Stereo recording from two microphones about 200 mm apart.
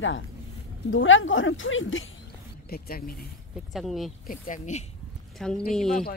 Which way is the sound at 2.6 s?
50° left (ahead or behind).